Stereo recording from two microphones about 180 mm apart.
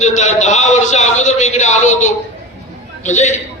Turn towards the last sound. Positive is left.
turn(degrees=40)  # may be behind; listen again after turning